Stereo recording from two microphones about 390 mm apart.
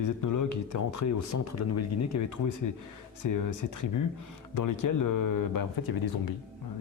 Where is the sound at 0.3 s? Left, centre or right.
Left.